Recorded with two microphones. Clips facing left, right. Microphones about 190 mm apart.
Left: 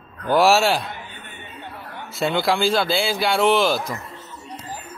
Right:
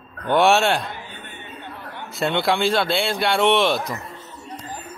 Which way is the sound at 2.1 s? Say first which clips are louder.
Even; centre (ahead or behind).